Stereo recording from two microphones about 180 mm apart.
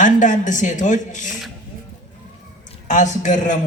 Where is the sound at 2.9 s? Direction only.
45° left (ahead or behind).